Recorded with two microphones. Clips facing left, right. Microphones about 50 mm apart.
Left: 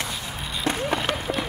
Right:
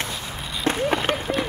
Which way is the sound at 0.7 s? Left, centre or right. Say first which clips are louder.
Right 3 dB; right.